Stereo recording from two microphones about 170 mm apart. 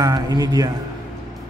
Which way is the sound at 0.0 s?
20° right (ahead or behind).